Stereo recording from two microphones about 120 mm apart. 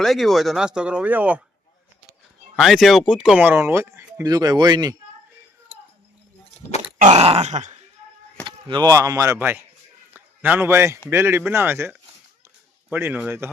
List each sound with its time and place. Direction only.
0.0 s speech: centre (ahead or behind)
2.6 s speech: centre (ahead or behind); by 4.9 s 35° right (ahead or behind)
7.0 s a sound: 65° right (ahead or behind); by 7.9 s 80° right
8.4 s speech: 40° right (ahead or behind); by 9.6 s 20° right (ahead or behind)
10.1 s a sound: 15° right (ahead or behind)
11.1 s speech: 20° right (ahead or behind)
12.9 s speech: 15° right (ahead or behind)